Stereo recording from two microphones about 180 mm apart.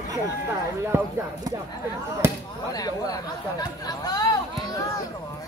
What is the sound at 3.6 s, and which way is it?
Speech, 20° left (ahead or behind).